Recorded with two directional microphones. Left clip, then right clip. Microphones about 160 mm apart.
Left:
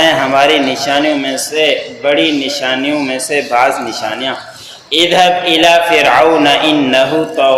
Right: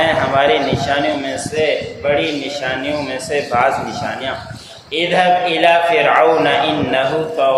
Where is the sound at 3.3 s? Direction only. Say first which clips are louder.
Left 4 dB; 30° left (ahead or behind).